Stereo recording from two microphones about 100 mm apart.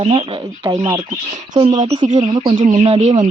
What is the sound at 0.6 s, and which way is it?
Speech, 35° right (ahead or behind).